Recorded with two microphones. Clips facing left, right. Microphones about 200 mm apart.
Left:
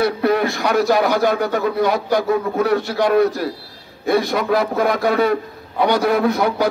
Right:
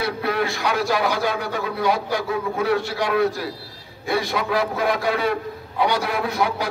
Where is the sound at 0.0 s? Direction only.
45° left (ahead or behind).